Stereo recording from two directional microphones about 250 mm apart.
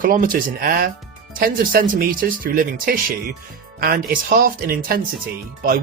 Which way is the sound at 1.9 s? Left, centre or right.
Right.